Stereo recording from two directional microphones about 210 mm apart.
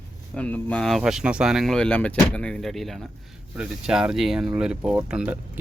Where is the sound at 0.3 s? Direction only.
5° left (ahead or behind).